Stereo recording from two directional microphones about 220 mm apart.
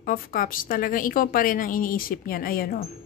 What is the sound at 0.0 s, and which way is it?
A woman's voice, 40° left (ahead or behind).